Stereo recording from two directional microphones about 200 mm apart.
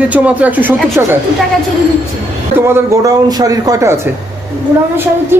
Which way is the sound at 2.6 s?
15° right (ahead or behind).